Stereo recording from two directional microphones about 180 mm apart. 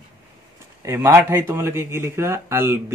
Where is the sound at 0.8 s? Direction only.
15° right (ahead or behind).